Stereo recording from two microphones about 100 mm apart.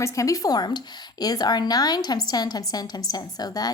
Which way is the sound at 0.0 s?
35° left (ahead or behind).